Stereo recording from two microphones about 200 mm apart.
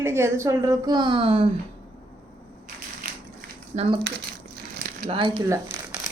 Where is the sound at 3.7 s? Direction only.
30° right (ahead or behind).